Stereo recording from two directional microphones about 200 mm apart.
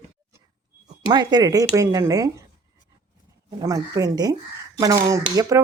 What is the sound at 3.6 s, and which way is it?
Speech, 15° right (ahead or behind).